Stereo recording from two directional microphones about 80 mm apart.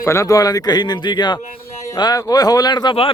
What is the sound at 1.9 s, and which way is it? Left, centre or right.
Speech, left.